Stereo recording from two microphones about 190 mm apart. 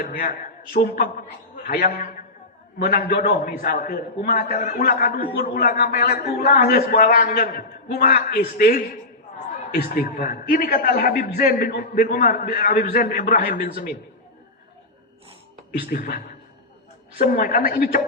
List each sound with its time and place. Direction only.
0.0 s a man's voice: 50° left (ahead or behind)
15.8 s a man's voice: 50° left (ahead or behind)